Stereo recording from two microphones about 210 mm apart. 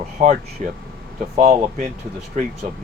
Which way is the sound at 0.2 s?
35° right (ahead or behind).